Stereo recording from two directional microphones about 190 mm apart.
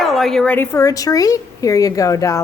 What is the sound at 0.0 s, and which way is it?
A woman's voice, centre (ahead or behind).